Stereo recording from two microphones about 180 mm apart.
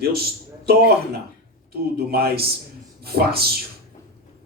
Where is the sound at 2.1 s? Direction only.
60° right (ahead or behind).